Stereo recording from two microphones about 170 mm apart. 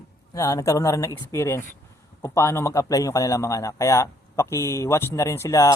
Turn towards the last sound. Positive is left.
turn(degrees=20)  # may be behind; listen again after turning